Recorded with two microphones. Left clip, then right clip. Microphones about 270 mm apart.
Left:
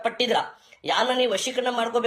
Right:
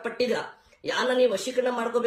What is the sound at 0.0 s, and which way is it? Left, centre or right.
Speech, centre.